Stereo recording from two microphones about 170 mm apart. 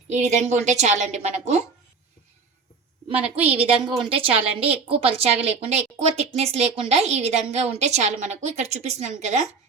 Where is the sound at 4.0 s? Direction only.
30° right (ahead or behind).